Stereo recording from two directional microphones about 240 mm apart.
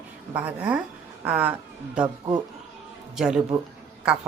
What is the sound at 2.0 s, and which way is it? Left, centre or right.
Speech, centre.